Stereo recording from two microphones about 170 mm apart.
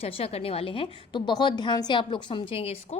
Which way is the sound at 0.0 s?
35° left (ahead or behind).